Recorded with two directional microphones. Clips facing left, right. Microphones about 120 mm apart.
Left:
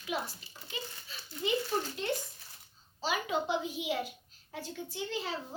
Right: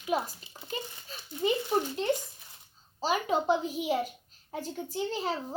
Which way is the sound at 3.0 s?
40° right (ahead or behind).